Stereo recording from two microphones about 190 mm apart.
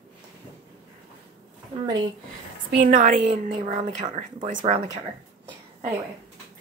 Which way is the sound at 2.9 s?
45° right (ahead or behind).